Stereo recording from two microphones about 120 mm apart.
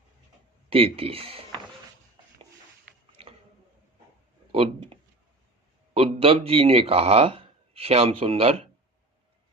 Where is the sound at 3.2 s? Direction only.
55° right (ahead or behind).